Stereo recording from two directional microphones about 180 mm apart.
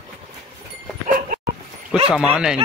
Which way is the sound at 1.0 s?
50° right (ahead or behind).